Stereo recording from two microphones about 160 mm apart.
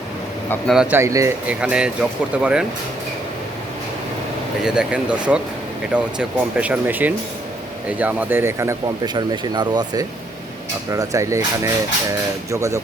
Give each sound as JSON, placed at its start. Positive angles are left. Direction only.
{"t": 0.7, "sound": "speech", "side_deg": -5}
{"t": 0.9, "sound": "speech", "side_deg": -20}
{"t": 1.5, "sound": "speech", "side_deg": -5}
{"t": 4.6, "sound": "speech", "side_deg": -5}
{"t": 9.1, "sound": "speech", "side_deg": -30}